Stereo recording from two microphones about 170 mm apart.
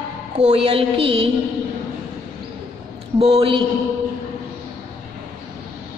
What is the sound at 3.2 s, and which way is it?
Speech, 35° right (ahead or behind).